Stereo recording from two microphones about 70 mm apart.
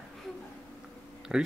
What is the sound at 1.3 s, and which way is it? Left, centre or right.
Speech, centre.